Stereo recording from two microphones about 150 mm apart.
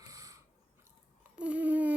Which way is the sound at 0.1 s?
20° right (ahead or behind).